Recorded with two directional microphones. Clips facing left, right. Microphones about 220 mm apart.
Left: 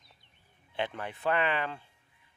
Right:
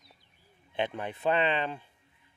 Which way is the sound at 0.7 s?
20° right (ahead or behind).